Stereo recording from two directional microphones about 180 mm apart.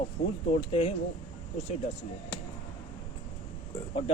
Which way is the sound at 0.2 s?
35° left (ahead or behind).